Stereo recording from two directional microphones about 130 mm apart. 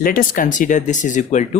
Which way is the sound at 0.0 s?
90° left.